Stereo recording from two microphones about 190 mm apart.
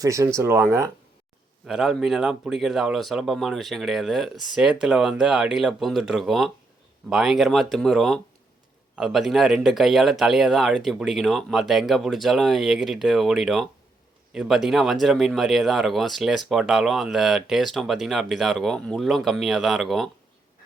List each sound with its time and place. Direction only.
0.0 s speech: 15° right (ahead or behind)
1.6 s speech: centre (ahead or behind)